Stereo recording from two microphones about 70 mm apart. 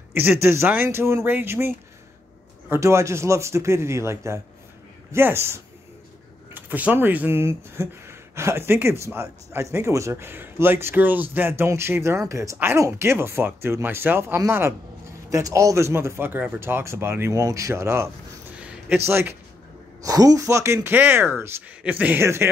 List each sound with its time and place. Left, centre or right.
0.1 s speech: right
1.2 s speech: right
6.5 s speech: right
7.3 s speech: right
15.2 s speech: right
17.3 s speech: right
18.9 s speech: right
20.0 s a woman's voice: right
20.4 s speech: right
20.9 s speech: right
21.8 s speech: right
22.2 s speech: right